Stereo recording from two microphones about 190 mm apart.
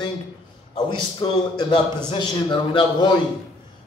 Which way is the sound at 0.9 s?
25° left (ahead or behind).